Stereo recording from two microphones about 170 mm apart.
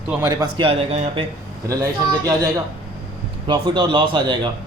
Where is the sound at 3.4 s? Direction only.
25° right (ahead or behind).